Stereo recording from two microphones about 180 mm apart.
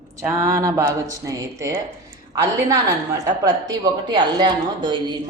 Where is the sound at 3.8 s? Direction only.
25° right (ahead or behind).